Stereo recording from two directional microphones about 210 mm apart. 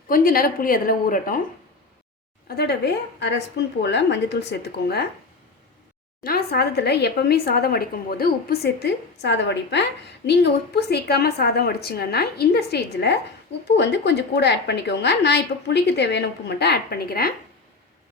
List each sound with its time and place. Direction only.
0.1 s speech: 45° left (ahead or behind)
2.6 s a woman's voice: 50° left (ahead or behind)
6.2 s speech: 45° left (ahead or behind)